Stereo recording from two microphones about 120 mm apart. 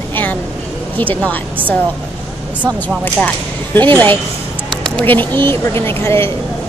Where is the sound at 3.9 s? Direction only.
15° left (ahead or behind).